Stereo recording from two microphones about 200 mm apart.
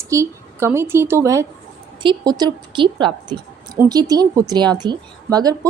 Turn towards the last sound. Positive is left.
turn(degrees=-20)  # may be behind; listen again after turning